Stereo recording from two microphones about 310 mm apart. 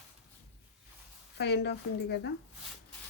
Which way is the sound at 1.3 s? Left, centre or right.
Left.